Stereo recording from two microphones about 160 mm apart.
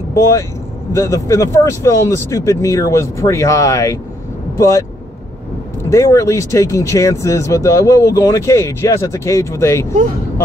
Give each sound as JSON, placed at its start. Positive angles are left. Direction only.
{"t": 0.1, "sound": "speech", "side_deg": 20}
{"t": 5.9, "sound": "speech", "side_deg": 20}